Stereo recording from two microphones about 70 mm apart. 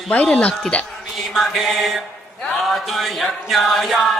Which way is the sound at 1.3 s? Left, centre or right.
Centre.